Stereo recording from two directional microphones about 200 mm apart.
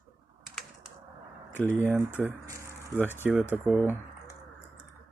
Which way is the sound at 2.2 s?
15° right (ahead or behind).